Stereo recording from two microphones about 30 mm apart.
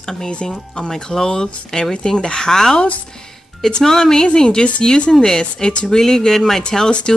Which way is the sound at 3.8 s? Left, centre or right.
Centre.